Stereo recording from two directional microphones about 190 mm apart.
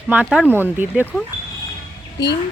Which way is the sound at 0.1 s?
5° right (ahead or behind).